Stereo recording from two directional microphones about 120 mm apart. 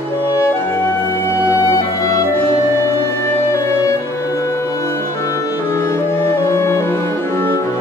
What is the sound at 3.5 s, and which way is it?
Music, 25° left (ahead or behind).